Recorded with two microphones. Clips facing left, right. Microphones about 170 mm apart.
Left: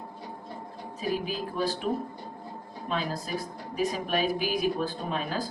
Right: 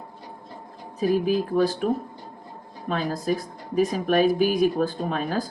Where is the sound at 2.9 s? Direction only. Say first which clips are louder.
Right 6 dB; 50° right (ahead or behind).